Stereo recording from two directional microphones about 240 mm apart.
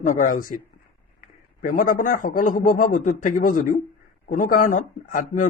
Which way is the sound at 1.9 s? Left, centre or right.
Left.